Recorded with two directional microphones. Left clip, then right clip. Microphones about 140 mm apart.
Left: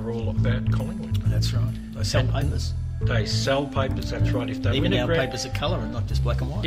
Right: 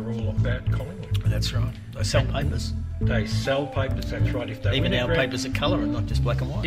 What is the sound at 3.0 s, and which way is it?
Speech, 50° left (ahead or behind).